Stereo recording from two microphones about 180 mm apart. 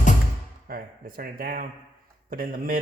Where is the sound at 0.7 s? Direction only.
55° right (ahead or behind).